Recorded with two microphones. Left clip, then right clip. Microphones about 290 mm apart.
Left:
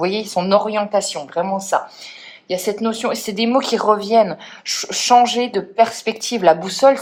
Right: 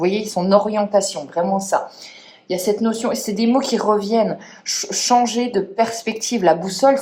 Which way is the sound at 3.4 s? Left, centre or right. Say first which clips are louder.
Left 2 dB; centre.